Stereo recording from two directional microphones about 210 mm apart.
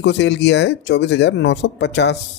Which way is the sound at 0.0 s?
55° left (ahead or behind).